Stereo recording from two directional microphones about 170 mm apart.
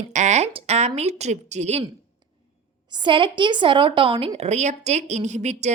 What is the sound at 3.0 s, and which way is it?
A woman's voice, 30° right (ahead or behind).